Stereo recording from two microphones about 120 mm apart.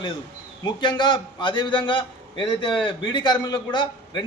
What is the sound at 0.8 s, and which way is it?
A man's voice, 40° left (ahead or behind).